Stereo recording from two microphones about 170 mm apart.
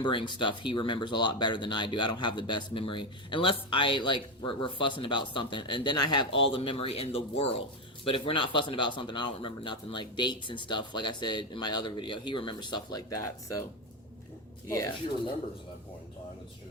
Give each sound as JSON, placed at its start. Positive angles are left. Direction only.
{"t": 0.0, "sound": "speech", "side_deg": 30}